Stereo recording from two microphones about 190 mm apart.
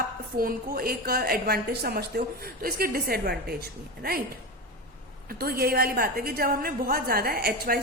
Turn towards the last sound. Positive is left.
turn(degrees=-50)  # may be behind; listen again after turning